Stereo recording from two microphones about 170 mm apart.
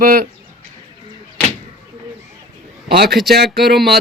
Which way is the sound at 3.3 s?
70° right (ahead or behind).